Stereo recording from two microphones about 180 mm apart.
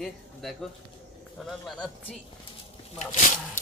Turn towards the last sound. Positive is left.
turn(degrees=45)  # may be behind; listen again after turning